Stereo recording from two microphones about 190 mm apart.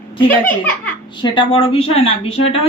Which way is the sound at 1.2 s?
25° left (ahead or behind).